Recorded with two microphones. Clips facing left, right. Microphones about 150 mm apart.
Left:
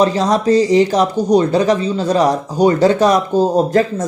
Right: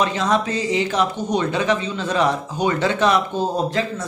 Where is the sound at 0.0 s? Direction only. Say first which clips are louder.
Left 6 dB; 35° left (ahead or behind).